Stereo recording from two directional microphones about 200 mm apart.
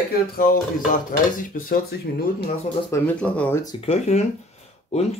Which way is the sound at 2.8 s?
10° left (ahead or behind).